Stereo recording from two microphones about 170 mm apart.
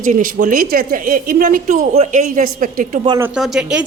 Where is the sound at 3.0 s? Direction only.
20° right (ahead or behind).